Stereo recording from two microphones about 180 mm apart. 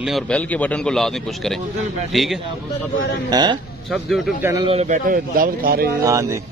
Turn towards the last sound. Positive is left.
turn(degrees=-15)  # may be behind; listen again after turning